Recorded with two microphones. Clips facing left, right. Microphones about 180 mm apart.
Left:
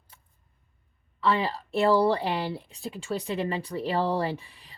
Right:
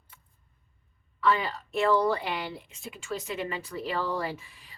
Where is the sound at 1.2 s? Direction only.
30° left (ahead or behind).